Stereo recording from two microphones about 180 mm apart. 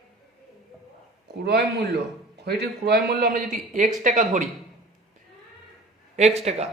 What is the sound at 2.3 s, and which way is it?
A man's voice, 65° right (ahead or behind).